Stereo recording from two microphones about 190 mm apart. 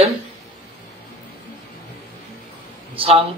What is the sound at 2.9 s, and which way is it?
Speech, 30° right (ahead or behind).